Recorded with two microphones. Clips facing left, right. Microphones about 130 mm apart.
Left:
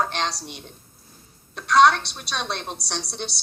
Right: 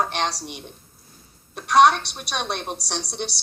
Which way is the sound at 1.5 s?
20° right (ahead or behind).